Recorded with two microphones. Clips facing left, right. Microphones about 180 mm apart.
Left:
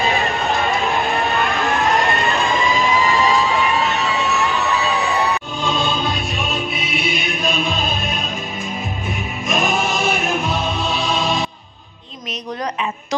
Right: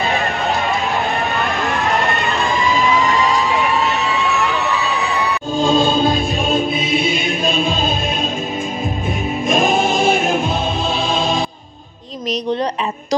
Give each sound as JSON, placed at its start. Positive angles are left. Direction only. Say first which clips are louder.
{"t": 5.6, "sound": "music", "louder": "right 10 dB", "side_deg": -30}
{"t": 9.5, "sound": "choir", "louder": "right 4 dB", "side_deg": -30}